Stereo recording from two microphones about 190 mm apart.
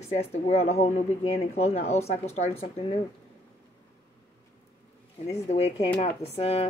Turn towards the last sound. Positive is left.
turn(degrees=30)  # may be behind; listen again after turning